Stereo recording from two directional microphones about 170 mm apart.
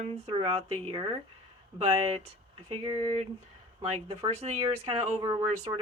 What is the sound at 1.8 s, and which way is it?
Speech, 35° right (ahead or behind).